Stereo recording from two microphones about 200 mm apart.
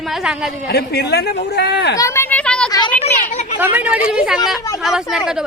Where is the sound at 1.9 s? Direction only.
15° left (ahead or behind).